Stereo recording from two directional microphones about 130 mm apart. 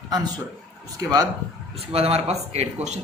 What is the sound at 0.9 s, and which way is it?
Speech, 25° right (ahead or behind).